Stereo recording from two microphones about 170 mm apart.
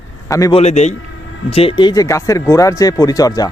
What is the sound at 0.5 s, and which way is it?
Speech, 40° left (ahead or behind).